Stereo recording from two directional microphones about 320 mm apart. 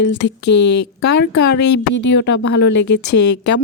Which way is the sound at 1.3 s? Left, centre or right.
Left.